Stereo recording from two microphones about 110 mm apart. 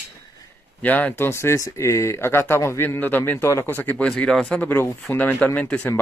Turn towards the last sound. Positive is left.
turn(degrees=10)  # may be behind; listen again after turning